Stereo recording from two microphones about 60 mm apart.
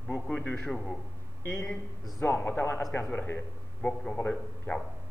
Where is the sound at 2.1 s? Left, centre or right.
Left.